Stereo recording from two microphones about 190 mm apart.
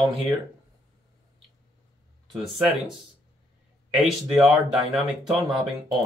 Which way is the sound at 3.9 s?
5° right (ahead or behind).